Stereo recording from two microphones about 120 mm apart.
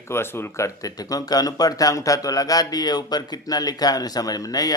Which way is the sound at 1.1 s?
30° left (ahead or behind).